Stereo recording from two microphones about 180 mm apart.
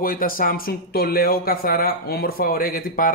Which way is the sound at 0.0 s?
50° left (ahead or behind).